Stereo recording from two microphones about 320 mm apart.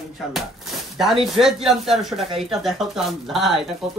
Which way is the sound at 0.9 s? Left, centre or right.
Centre.